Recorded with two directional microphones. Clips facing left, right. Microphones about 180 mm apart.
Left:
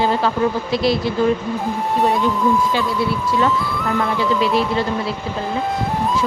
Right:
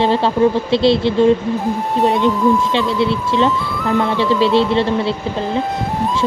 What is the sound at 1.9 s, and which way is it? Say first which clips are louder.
Speech: right 2 dB; centre (ahead or behind).